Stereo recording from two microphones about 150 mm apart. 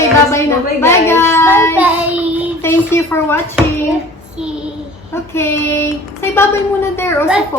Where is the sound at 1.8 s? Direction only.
10° right (ahead or behind).